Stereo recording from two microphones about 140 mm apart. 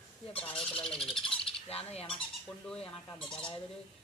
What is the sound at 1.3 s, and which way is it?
Bird, 45° left (ahead or behind).